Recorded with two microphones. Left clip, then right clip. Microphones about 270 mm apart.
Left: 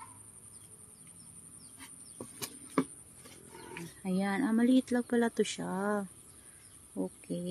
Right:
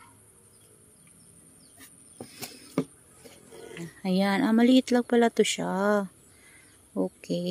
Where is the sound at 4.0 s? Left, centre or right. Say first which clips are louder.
Right 8 dB; right.